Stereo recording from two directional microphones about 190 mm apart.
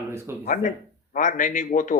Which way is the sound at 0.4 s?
40° left (ahead or behind).